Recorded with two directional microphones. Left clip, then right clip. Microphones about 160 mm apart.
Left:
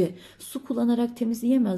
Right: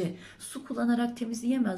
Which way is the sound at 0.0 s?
25° left (ahead or behind).